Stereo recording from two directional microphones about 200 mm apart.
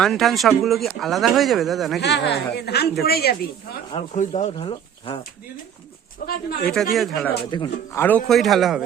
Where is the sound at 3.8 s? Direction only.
30° left (ahead or behind).